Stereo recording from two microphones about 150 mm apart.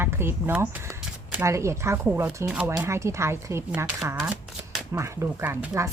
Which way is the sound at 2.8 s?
20° right (ahead or behind).